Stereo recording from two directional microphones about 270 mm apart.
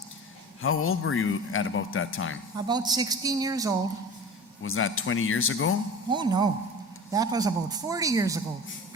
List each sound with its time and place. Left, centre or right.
0.6 s a man's voice: left
2.6 s a man's voice: centre
4.6 s a man's voice: left
6.1 s a man's voice: centre